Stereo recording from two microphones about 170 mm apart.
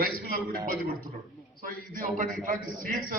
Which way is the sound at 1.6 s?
50° right (ahead or behind).